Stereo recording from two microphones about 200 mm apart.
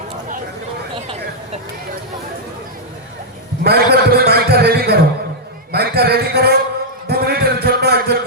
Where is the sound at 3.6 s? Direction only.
50° right (ahead or behind).